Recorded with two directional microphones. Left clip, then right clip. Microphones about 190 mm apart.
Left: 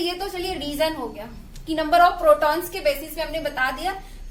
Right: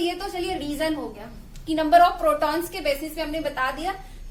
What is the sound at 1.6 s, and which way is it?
A woman's voice, 20° right (ahead or behind).